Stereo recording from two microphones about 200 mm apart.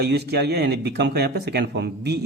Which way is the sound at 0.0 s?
55° right (ahead or behind).